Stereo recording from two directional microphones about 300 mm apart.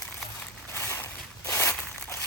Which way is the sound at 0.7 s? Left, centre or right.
Centre.